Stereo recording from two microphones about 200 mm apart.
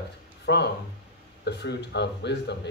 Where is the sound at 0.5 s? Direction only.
55° left (ahead or behind).